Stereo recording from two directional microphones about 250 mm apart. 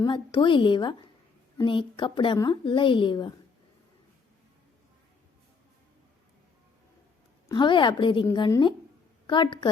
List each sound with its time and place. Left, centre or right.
0.0 s a woman's voice: centre
7.4 s a woman's voice: centre